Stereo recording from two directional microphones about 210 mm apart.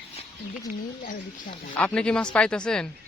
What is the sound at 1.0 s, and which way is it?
Speech, 40° left (ahead or behind).